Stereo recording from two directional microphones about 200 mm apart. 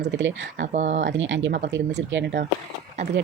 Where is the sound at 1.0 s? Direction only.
65° right (ahead or behind).